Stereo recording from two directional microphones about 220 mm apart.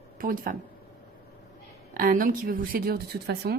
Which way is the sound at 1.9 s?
40° right (ahead or behind).